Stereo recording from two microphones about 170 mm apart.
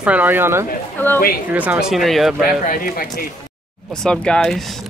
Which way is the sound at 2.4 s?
55° left (ahead or behind).